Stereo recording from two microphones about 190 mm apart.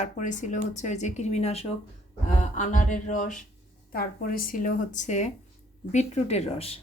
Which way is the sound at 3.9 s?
50° left (ahead or behind).